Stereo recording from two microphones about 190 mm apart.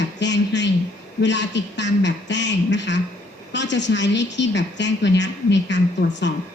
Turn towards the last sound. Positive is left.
turn(degrees=70)  # may be behind; listen again after turning